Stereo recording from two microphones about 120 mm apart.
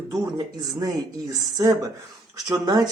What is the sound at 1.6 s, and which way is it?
Speech, 30° right (ahead or behind).